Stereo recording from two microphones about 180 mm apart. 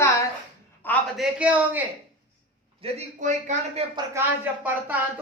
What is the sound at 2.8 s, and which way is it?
A man's voice, 40° right (ahead or behind).